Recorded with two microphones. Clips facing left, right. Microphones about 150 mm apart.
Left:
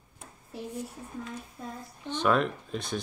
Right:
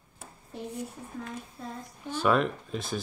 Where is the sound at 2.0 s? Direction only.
5° right (ahead or behind).